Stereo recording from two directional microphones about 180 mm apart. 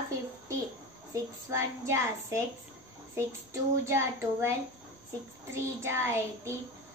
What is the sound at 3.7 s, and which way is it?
Speech, 15° right (ahead or behind).